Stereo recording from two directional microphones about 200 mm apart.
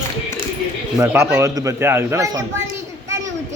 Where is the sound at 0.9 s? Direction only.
15° right (ahead or behind).